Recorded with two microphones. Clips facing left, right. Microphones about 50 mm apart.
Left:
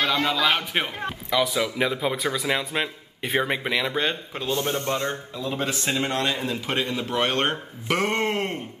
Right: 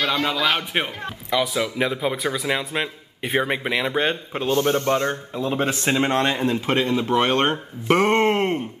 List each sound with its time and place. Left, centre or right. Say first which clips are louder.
0.0 s a man's voice: right 1 dB; centre; by 8.5 s right